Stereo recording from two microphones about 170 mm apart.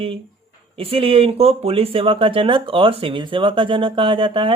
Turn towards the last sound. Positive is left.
turn(degrees=-30)  # may be behind; listen again after turning